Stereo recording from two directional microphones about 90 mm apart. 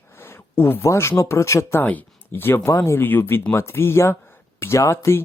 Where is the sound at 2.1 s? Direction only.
25° left (ahead or behind).